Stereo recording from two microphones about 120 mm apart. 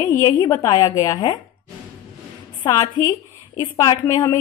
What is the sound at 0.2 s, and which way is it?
A woman's voice, 30° left (ahead or behind).